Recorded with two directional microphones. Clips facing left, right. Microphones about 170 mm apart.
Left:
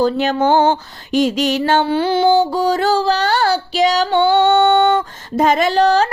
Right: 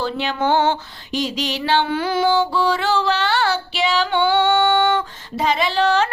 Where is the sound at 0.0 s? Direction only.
40° left (ahead or behind).